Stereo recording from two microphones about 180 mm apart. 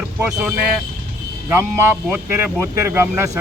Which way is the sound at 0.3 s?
5° right (ahead or behind).